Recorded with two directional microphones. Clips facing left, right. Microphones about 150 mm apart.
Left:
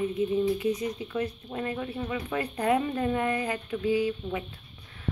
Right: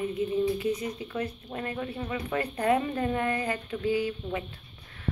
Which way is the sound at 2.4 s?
15° left (ahead or behind).